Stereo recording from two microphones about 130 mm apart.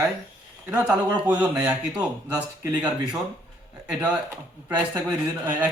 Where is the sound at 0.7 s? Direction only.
10° right (ahead or behind).